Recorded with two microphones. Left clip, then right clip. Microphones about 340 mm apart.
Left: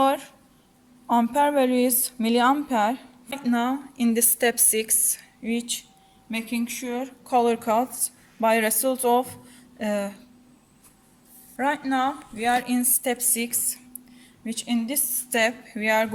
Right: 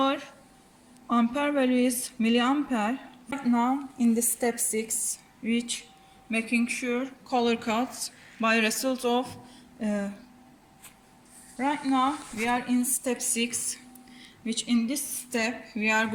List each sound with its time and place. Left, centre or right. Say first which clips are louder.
0.0 s a sound: left 5 dB; left
1.1 s a woman's voice: left 6 dB; left
11.5 s a woman's voice: left 3 dB; left